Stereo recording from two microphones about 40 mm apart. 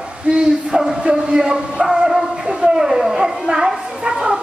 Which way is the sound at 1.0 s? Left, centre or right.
Right.